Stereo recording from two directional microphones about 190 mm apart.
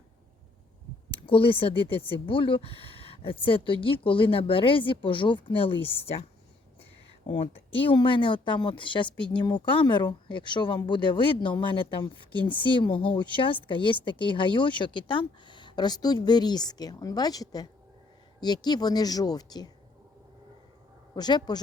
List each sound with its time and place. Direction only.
1.3 s speech: 30° left (ahead or behind)
7.3 s speech: 30° left (ahead or behind)
21.2 s speech: 20° left (ahead or behind)